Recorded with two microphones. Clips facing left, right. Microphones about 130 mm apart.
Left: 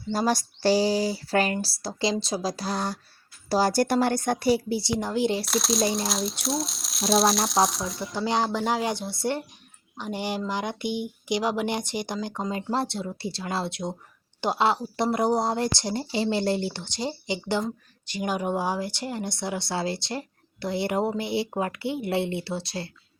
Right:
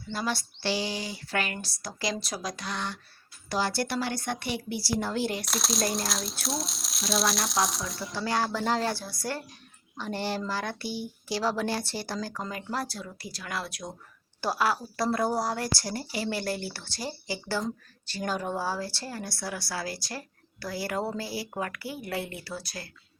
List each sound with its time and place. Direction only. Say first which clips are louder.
0.1 s speech: left 7 dB; 40° left (ahead or behind)
4.8 s speech: left 4 dB; 20° left (ahead or behind)
5.5 s speech: left 5 dB; centre (ahead or behind)
8.2 s speech: left 3 dB; 20° left (ahead or behind)
10.0 s speech: left 2 dB; 15° left (ahead or behind)